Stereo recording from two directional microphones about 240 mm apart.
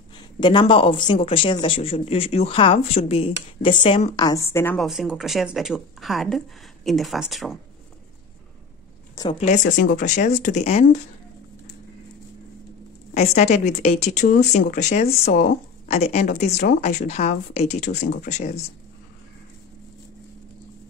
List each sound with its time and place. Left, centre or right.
0.4 s speech: centre
9.1 s speech: centre
9.9 s speech: left
13.1 s speech: left